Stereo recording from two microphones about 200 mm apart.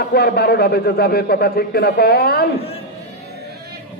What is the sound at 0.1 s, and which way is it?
A man's voice, 55° left (ahead or behind).